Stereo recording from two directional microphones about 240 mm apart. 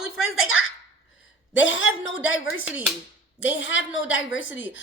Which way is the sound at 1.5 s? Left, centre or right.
Left.